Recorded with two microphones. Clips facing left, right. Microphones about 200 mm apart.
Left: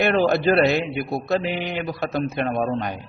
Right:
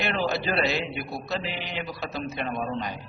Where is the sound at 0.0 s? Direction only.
50° left (ahead or behind).